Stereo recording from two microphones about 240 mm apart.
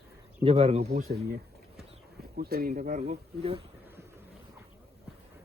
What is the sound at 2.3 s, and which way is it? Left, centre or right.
Speech, right.